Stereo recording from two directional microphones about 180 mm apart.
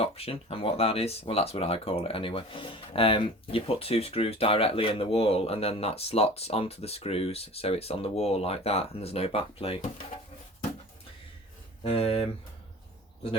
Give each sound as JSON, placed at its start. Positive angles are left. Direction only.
{"t": 0.0, "sound": "speech", "side_deg": 35}
{"t": 11.8, "sound": "speech", "side_deg": 35}